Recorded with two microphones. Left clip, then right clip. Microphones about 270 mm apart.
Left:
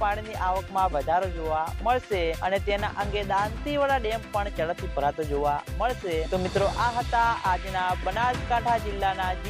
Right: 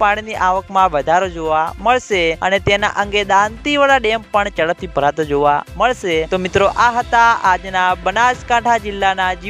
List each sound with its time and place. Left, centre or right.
0.0 s speech: right
6.8 s speech: right
7.4 s music: right
7.9 s speech: right